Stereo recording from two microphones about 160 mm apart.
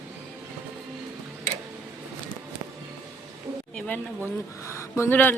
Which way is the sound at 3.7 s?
5° left (ahead or behind).